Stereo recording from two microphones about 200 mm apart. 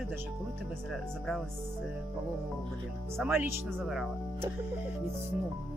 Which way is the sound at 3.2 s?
10° right (ahead or behind).